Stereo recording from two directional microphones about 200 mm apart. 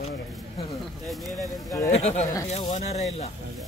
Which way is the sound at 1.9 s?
35° left (ahead or behind).